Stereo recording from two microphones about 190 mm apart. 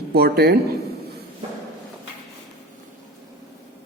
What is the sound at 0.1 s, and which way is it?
Speech, 55° right (ahead or behind).